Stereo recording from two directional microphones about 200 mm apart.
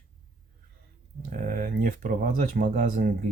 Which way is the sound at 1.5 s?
45° right (ahead or behind).